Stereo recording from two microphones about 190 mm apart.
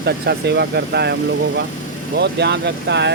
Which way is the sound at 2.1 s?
60° right (ahead or behind).